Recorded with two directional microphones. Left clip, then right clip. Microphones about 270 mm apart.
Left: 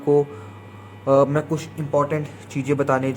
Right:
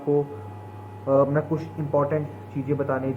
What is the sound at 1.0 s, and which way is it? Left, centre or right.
A man's voice, left.